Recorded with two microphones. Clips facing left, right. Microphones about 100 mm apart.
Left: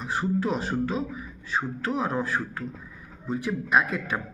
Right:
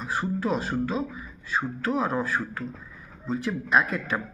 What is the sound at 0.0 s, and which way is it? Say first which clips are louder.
A man's voice: left 1 dB; 15° left (ahead or behind).